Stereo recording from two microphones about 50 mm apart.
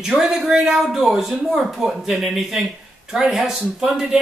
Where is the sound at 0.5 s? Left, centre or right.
Centre.